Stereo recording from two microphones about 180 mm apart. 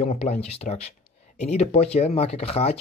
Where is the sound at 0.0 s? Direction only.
35° left (ahead or behind).